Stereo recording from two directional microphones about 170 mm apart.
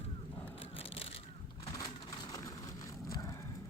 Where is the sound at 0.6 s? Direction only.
35° left (ahead or behind).